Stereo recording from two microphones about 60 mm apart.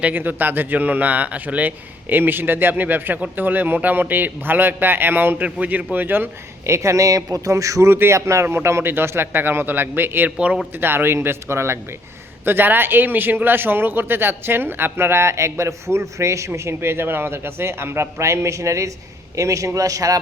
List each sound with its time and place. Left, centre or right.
0.0 s a man's voice: right
6.7 s speech: right
8.4 s a man's voice: right
10.2 s speech: centre
10.8 s a man's voice: right
12.5 s a man's voice: right
16.6 s a man's voice: right